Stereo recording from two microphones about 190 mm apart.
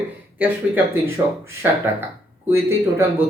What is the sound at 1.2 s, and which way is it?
Speech, 20° right (ahead or behind).